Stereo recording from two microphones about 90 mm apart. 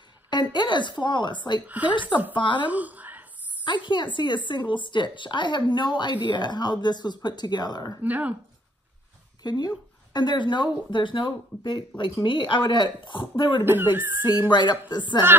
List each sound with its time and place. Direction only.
0.3 s a woman's voice: 55° left (ahead or behind)
1.7 s speech: 15° right (ahead or behind)
2.0 s a woman's voice: 65° left (ahead or behind)
2.7 s a sound: 15° right (ahead or behind)
3.6 s a woman's voice: 60° left (ahead or behind)
8.0 s speech: 15° right (ahead or behind)
9.4 s a woman's voice: 50° left (ahead or behind); by 13.7 s 65° left (ahead or behind)
13.7 s speech: 20° right (ahead or behind)
14.5 s a woman's voice: 60° left (ahead or behind)